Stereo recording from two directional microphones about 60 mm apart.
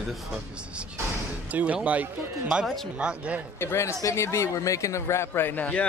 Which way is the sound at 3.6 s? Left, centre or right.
Left.